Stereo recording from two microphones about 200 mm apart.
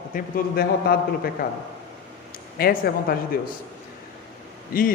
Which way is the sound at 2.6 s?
50° left (ahead or behind).